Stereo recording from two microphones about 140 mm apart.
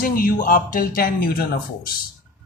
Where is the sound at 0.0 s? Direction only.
85° left.